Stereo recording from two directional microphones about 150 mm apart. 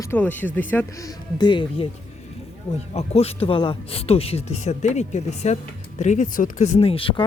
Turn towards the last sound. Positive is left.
turn(degrees=35)  # may be behind; listen again after turning